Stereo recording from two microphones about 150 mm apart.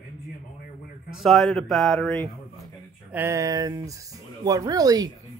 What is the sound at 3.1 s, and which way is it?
Speech, 15° right (ahead or behind).